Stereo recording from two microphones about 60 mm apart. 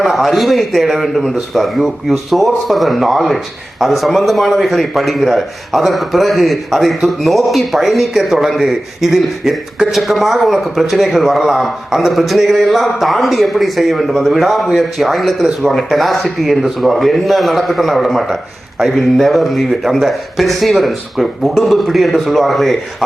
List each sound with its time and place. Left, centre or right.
0.0 s speech: centre